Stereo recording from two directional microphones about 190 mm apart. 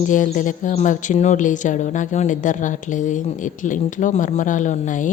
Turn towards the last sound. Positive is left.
turn(degrees=40)  # may be behind; listen again after turning